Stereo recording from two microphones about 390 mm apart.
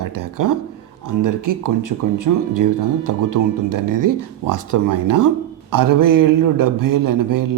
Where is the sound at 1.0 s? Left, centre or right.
Right.